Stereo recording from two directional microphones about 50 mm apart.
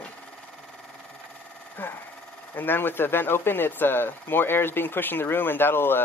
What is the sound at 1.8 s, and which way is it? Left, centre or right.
Speech, left.